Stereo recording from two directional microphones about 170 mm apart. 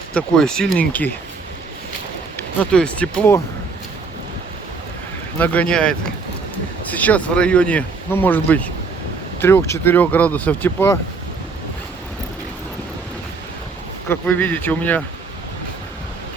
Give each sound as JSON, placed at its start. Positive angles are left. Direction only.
{"t": 0.1, "sound": "speech", "side_deg": 5}
{"t": 2.3, "sound": "speech", "side_deg": 5}
{"t": 5.4, "sound": "speech", "side_deg": 10}
{"t": 14.1, "sound": "speech", "side_deg": 10}